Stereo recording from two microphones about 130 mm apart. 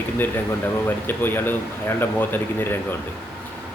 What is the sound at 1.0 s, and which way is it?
Speech, 15° left (ahead or behind).